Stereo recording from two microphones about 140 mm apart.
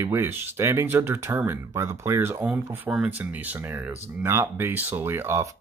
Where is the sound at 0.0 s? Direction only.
15° right (ahead or behind).